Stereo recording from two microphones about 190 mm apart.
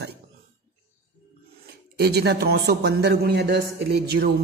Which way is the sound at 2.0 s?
60° right (ahead or behind).